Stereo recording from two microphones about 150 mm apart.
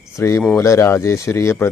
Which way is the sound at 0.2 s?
20° left (ahead or behind).